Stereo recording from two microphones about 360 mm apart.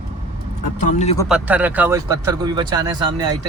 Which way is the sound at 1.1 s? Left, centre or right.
Centre.